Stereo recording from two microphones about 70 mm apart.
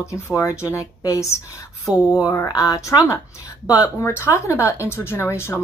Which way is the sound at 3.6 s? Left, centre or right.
Left.